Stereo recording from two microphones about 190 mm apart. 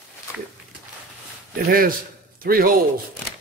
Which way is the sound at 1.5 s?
50° right (ahead or behind).